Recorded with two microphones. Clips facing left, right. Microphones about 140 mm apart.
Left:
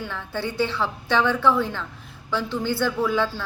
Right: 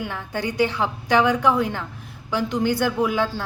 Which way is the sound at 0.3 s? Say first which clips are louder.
Right 3 dB; 15° right (ahead or behind).